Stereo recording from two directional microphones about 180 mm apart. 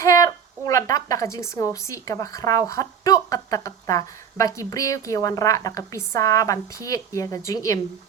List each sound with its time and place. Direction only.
0.0 s a woman's voice: 20° left (ahead or behind)